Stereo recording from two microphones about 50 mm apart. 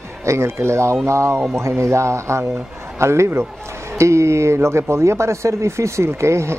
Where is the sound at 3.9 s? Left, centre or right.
Right.